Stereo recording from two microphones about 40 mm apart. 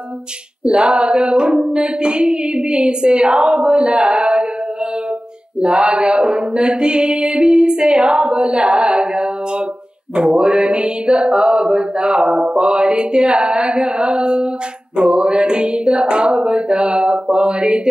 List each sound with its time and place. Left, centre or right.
0.7 s music: right
5.6 s music: right
12.4 s mantra: centre
12.6 s music: right